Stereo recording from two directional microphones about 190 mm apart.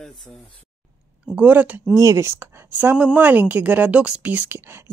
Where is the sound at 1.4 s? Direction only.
10° right (ahead or behind).